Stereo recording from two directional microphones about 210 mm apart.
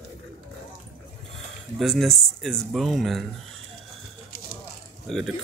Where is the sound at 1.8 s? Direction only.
Centre (ahead or behind).